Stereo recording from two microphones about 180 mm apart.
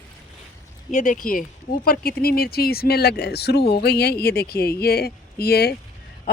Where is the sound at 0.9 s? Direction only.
45° left (ahead or behind); by 5.8 s 60° left (ahead or behind).